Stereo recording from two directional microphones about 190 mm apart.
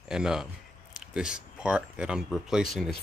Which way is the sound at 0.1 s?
5° right (ahead or behind).